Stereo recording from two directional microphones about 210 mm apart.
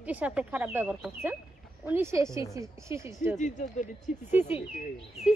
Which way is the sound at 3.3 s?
35° left (ahead or behind).